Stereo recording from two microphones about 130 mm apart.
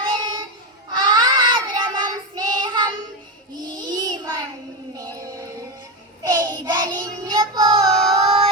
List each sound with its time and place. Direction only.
0.0 s child singing: 35° right (ahead or behind)
3.9 s a sound: 35° right (ahead or behind)
5.2 s music: 25° right (ahead or behind)
6.2 s child singing: 30° right (ahead or behind)